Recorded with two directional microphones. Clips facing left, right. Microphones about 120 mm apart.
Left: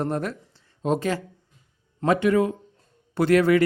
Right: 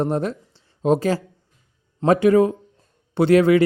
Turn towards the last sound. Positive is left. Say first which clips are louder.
# right 4 dB
turn(degrees=-25)  # may be behind; listen again after turning